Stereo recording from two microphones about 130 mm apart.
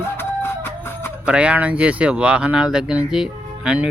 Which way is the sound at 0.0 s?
20° left (ahead or behind).